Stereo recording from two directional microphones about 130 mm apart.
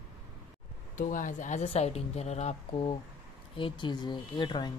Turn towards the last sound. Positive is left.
turn(degrees=35)  # may be behind; listen again after turning